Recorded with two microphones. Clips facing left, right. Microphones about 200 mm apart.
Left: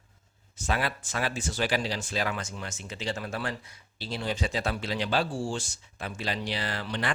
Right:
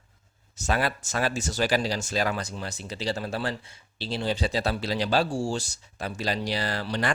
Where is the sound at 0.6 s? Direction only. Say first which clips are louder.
Right 3 dB; 40° right (ahead or behind).